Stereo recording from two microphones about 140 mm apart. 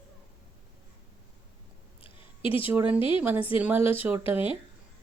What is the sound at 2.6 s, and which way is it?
Speech, 10° right (ahead or behind).